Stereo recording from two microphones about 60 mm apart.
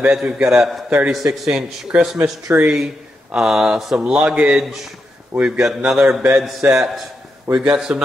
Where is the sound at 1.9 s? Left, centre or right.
Right.